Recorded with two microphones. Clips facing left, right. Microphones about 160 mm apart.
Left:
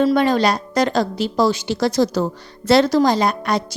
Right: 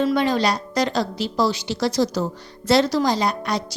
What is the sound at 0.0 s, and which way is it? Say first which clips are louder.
A woman's voice: left 4 dB; 50° left (ahead or behind).